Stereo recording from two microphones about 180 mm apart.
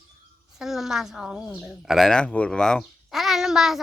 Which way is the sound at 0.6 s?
Centre (ahead or behind).